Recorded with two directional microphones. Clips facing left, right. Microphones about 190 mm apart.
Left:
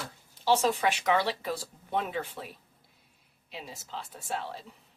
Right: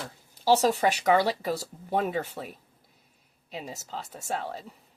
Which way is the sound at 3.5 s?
40° right (ahead or behind).